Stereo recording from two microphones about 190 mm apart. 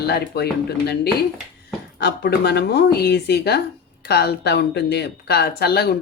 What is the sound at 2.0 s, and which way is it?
Speech, 60° left (ahead or behind).